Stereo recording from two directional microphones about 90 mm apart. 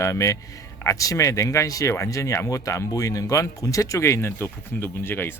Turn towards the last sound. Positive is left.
turn(degrees=25)  # may be behind; listen again after turning